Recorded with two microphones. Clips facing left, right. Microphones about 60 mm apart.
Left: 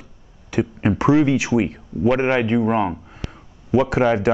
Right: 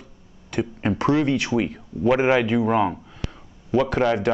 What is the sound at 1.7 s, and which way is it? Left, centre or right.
Speech, centre.